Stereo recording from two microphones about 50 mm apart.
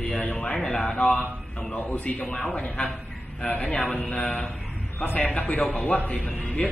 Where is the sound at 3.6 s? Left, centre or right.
Left.